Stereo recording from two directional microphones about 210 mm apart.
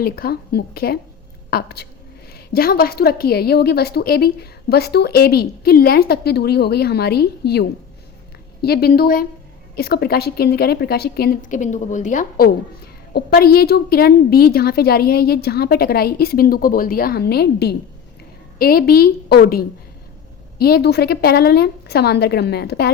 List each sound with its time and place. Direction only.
0.0 s a woman's voice: 45° left (ahead or behind)